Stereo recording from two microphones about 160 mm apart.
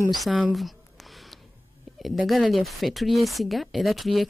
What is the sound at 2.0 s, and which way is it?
Speech, centre (ahead or behind).